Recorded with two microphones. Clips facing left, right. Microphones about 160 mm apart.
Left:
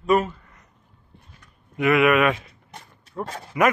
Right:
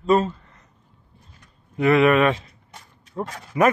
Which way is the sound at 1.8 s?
30° right (ahead or behind).